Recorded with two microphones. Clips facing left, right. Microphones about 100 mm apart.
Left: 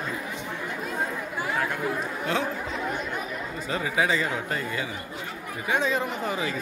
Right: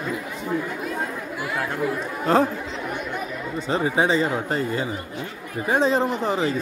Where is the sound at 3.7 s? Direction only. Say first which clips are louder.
Right 5 dB; 30° right (ahead or behind).